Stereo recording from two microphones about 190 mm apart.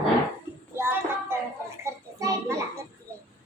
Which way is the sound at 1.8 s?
15° right (ahead or behind).